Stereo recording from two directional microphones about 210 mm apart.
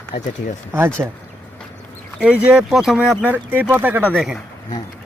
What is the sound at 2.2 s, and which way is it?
Speech, 5° right (ahead or behind).